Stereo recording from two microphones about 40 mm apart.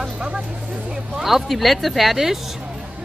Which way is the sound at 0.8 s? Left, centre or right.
Centre.